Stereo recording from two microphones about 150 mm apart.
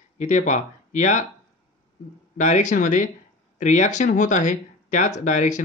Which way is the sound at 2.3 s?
55° left (ahead or behind).